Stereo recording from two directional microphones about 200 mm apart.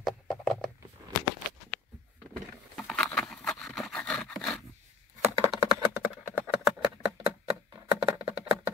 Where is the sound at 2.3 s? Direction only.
Centre (ahead or behind).